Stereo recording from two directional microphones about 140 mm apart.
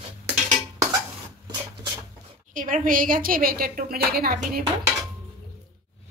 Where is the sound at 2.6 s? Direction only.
70° right (ahead or behind); by 4.6 s 90° right.